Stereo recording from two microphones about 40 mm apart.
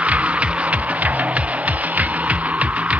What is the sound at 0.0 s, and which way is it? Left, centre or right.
Music, right.